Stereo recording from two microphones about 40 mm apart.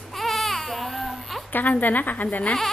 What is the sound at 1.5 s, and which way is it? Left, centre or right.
A woman's voice, left.